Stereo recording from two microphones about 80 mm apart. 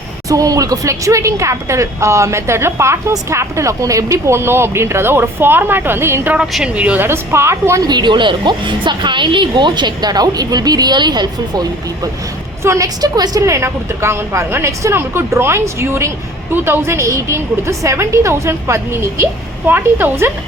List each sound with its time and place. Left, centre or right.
0.3 s speech: right
6.7 s a woman's voice: centre
7.1 s speech: right
7.8 s speech: right
12.6 s a woman's voice: right
13.4 s a woman's voice: right